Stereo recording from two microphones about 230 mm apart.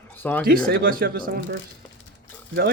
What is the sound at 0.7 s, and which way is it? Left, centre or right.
Speech, right.